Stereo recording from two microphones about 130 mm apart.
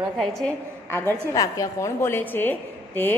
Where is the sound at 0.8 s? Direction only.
20° left (ahead or behind).